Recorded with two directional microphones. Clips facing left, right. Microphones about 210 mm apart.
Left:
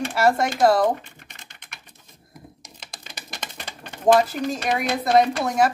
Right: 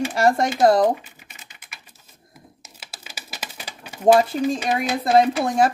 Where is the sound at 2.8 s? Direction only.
5° right (ahead or behind).